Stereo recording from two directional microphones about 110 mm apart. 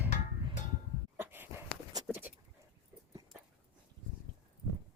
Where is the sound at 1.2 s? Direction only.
20° right (ahead or behind).